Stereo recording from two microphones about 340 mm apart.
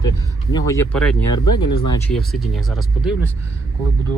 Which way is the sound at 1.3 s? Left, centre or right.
Left.